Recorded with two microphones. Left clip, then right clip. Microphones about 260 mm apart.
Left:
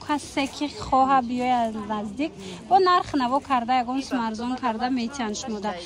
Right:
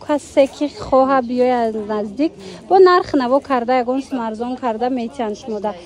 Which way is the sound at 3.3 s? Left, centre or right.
Right.